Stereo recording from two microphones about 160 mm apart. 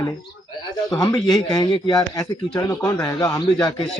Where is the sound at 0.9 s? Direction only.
25° left (ahead or behind).